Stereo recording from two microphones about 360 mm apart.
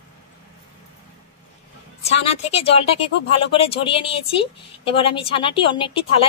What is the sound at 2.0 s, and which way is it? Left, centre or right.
A woman's voice, centre.